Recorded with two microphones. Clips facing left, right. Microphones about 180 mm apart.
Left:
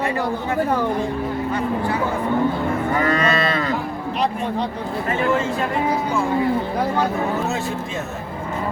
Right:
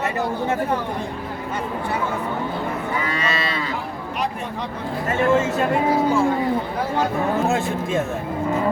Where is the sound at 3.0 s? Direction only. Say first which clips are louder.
Left 6 dB; 45° left (ahead or behind).